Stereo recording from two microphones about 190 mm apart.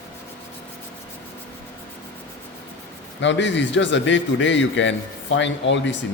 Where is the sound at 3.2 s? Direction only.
75° left (ahead or behind).